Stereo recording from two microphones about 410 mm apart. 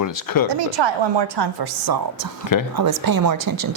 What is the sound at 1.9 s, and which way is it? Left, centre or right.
A woman's voice, right.